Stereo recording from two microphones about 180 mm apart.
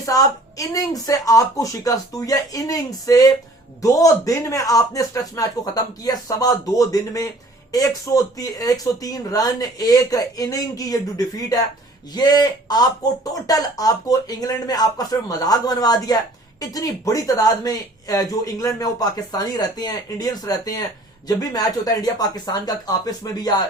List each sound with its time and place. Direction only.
0.0 s a woman's voice: 20° left (ahead or behind)